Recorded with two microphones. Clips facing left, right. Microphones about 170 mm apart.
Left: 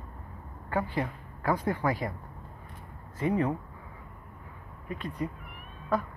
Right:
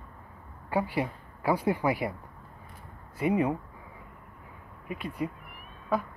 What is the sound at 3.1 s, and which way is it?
Speech, 10° right (ahead or behind).